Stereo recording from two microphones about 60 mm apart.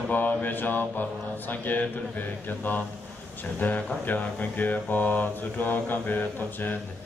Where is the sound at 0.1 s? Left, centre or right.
Left.